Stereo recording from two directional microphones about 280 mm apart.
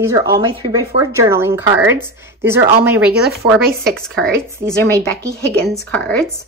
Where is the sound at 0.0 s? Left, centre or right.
Centre.